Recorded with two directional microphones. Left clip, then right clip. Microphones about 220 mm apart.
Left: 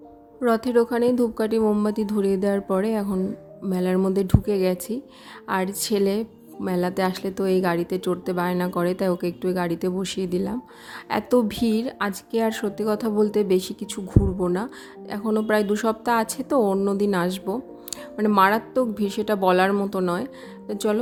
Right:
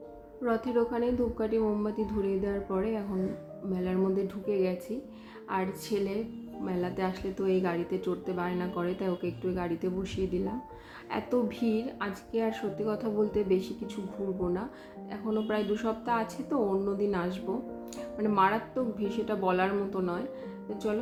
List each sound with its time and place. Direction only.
0.4 s a woman's voice: 50° left (ahead or behind)